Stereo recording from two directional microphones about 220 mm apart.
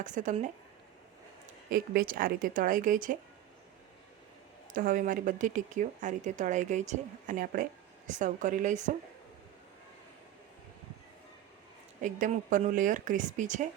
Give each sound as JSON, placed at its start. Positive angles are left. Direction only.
{"t": 0.0, "sound": "speech", "side_deg": -35}
{"t": 1.7, "sound": "speech", "side_deg": -40}
{"t": 4.7, "sound": "speech", "side_deg": -40}
{"t": 12.0, "sound": "speech", "side_deg": -35}